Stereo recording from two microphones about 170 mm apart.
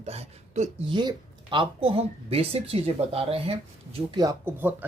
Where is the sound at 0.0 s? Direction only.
40° right (ahead or behind).